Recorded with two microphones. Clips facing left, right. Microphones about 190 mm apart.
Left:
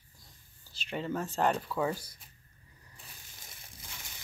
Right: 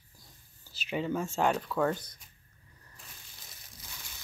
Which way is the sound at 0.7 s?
5° right (ahead or behind).